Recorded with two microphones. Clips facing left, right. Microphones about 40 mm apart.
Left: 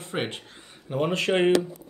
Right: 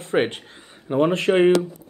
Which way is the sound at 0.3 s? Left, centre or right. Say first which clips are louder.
Right 2 dB; right.